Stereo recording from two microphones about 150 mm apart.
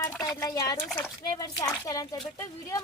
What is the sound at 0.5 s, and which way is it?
Speech, 20° left (ahead or behind).